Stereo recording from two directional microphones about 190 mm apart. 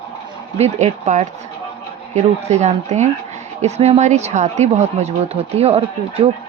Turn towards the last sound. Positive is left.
turn(degrees=-35)  # may be behind; listen again after turning